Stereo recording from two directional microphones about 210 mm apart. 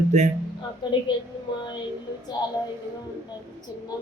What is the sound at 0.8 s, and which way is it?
Speech, 20° left (ahead or behind).